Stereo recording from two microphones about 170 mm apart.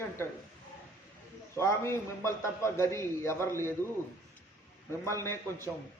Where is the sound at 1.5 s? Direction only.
15° left (ahead or behind).